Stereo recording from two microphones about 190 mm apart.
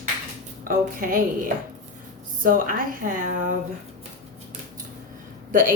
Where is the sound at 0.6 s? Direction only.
45° right (ahead or behind).